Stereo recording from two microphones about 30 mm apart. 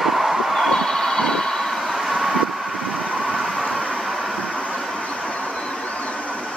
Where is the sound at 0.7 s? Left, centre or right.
Centre.